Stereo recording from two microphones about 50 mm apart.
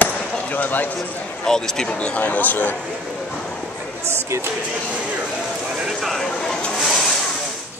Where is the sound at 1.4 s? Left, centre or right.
Centre; by 2.7 s left.